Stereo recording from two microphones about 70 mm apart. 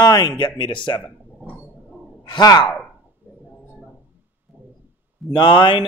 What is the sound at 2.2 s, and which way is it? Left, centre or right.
Sigh, left.